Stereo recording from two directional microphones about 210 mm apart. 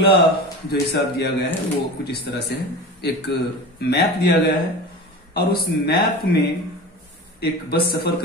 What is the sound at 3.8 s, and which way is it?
Speech, 50° left (ahead or behind).